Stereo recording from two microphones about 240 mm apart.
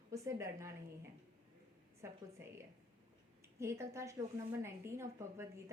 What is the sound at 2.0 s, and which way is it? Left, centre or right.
Speech, centre.